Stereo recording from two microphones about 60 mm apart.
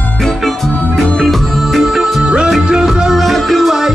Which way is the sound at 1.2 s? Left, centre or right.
Centre.